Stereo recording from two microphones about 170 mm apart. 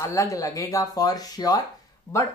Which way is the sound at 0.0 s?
20° left (ahead or behind).